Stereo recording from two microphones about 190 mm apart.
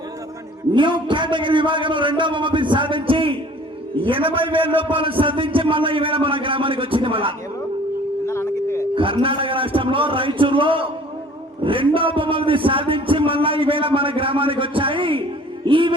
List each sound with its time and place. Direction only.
0.7 s a man's voice: 25° right (ahead or behind)
8.3 s a sound: 15° left (ahead or behind)
9.0 s a man's voice: 25° right (ahead or behind)